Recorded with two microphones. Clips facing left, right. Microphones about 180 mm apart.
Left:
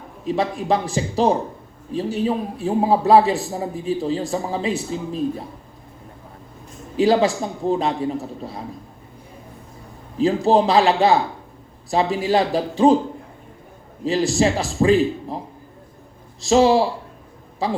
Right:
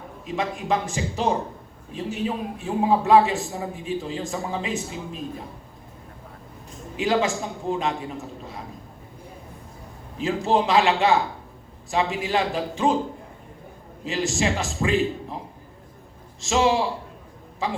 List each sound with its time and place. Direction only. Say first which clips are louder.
0.3 s a man's voice: left 5 dB; 35° left (ahead or behind)
6.9 s a man's voice: left 6 dB; 35° left (ahead or behind)
10.2 s a man's voice: left 6 dB; 35° left (ahead or behind)
14.0 s a man's voice: left 6 dB; 35° left (ahead or behind)
16.4 s a man's voice: left 6 dB; 35° left (ahead or behind)